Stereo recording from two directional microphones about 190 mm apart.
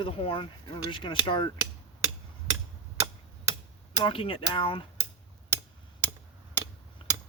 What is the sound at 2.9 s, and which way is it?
Tick-tock, 15° right (ahead or behind).